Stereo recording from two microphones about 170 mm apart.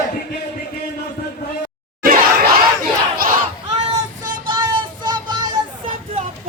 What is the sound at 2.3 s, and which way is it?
Battle cry, 60° right (ahead or behind).